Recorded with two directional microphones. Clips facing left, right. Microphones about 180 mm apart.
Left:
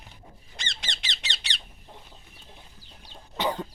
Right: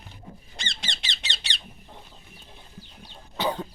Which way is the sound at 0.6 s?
30° right (ahead or behind).